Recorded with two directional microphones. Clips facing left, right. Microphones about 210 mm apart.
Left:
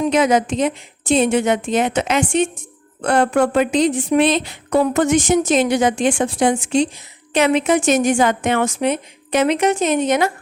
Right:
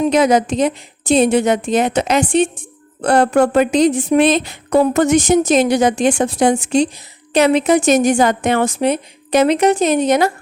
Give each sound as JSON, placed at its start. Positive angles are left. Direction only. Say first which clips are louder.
{"t": 0.1, "sound": "a woman's voice", "louder": "right 2 dB", "side_deg": -35}